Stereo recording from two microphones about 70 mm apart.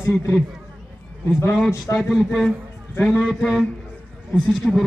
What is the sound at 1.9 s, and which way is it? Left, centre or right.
Speech, centre.